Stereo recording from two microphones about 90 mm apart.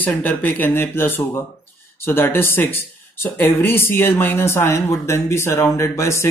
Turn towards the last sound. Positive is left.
turn(degrees=35)  # may be behind; listen again after turning